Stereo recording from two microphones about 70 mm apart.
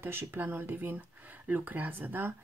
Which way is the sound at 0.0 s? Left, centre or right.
Right.